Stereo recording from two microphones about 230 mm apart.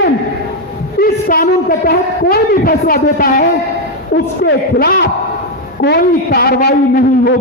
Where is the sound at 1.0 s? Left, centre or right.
Left.